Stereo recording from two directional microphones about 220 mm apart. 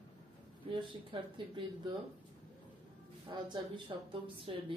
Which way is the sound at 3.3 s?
20° right (ahead or behind).